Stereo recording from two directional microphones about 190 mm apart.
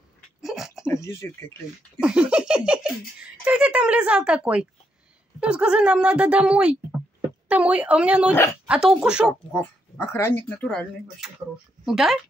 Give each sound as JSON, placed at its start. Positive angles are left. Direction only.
{"t": 0.4, "sound": "a sound", "side_deg": 0}
{"t": 0.8, "sound": "speech", "side_deg": 15}
{"t": 2.0, "sound": "speech", "side_deg": -5}
{"t": 9.5, "sound": "speech", "side_deg": 10}